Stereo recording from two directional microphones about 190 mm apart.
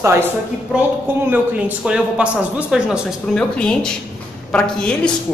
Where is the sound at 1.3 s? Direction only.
10° right (ahead or behind).